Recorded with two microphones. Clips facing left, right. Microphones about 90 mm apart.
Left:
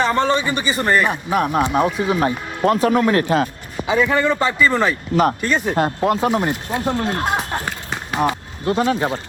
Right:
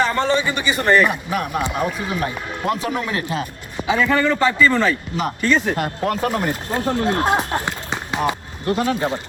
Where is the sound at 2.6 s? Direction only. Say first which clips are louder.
Left 7 dB; 40° left (ahead or behind).